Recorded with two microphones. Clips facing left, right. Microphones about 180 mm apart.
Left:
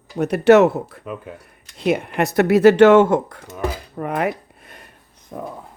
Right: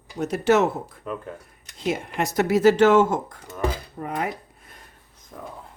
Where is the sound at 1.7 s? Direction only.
65° left (ahead or behind).